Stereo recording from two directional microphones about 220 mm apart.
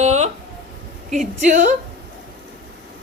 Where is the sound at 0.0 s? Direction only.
30° right (ahead or behind).